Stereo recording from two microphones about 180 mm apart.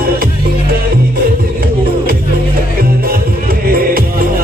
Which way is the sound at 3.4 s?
55° right (ahead or behind).